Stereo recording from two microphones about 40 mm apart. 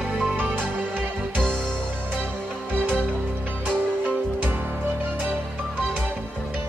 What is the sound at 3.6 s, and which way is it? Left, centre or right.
Music, right.